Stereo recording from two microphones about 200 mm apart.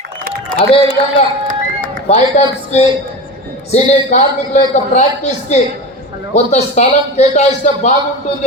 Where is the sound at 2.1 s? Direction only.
30° left (ahead or behind).